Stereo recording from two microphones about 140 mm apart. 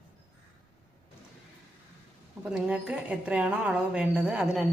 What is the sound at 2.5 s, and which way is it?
A woman's voice, 10° right (ahead or behind).